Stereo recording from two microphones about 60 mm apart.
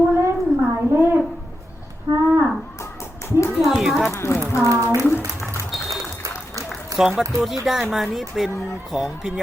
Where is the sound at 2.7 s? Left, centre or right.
Left.